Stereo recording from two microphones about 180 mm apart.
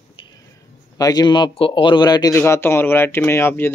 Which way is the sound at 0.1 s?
25° left (ahead or behind).